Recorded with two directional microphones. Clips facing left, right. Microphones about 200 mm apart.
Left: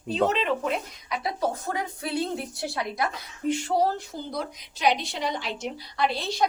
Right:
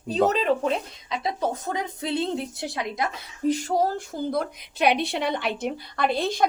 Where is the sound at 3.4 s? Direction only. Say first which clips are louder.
Right 1 dB; 40° right (ahead or behind).